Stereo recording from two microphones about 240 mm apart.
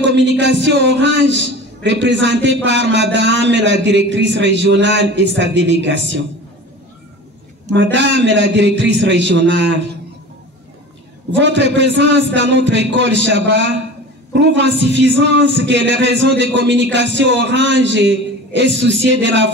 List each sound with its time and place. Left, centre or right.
0.0 s a man's voice: right
7.7 s a man's voice: right
11.3 s a man's voice: right